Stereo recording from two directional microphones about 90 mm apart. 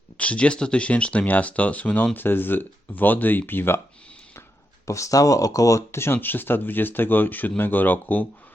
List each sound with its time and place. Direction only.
0.2 s speech: 15° left (ahead or behind)
4.9 s speech: 35° left (ahead or behind); by 8.3 s 20° left (ahead or behind)